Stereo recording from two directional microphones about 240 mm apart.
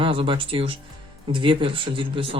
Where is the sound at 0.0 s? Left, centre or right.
Right.